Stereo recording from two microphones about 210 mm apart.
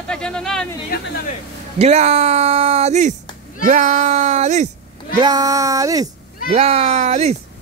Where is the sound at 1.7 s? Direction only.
30° right (ahead or behind).